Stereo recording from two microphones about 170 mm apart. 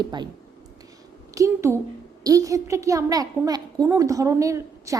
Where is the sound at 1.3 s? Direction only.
20° right (ahead or behind).